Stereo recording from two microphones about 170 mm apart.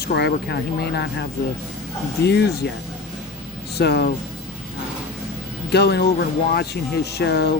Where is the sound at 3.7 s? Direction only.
75° left (ahead or behind).